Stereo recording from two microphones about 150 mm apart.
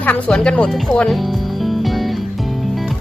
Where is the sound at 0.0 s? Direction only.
10° left (ahead or behind).